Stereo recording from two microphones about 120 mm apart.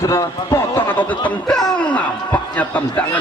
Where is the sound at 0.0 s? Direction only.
25° left (ahead or behind).